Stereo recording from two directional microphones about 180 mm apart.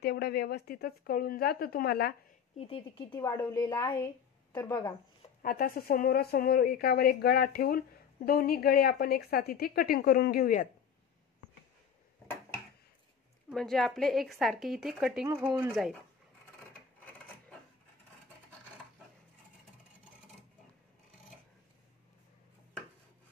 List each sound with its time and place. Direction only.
0.0 s a woman's voice: 65° left (ahead or behind)
2.5 s speech: 30° left (ahead or behind)
3.2 s a woman's voice: 20° left (ahead or behind)
5.4 s a woman's voice: 55° left (ahead or behind)
13.5 s a woman's voice: centre (ahead or behind)